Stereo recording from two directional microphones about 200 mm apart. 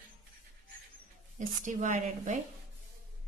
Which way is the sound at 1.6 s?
40° right (ahead or behind).